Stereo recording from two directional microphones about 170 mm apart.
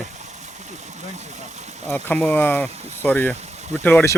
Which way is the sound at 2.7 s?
40° right (ahead or behind).